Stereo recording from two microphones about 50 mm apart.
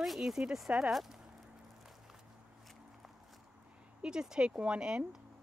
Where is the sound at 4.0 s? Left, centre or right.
Centre.